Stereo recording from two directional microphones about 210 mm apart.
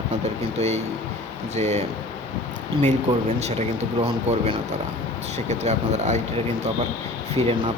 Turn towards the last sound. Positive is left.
turn(degrees=-30)  # may be behind; listen again after turning